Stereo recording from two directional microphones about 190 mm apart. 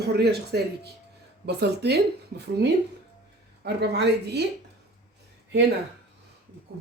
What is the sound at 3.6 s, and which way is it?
Speech, 60° right (ahead or behind).